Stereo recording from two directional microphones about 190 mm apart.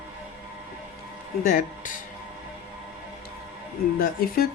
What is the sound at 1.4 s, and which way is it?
Speech, 45° left (ahead or behind).